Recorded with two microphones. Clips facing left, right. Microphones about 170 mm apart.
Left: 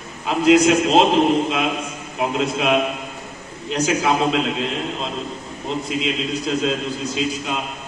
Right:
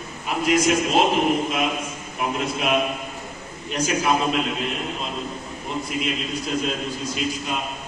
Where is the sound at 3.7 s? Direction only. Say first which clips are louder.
Left 3 dB; 80° left.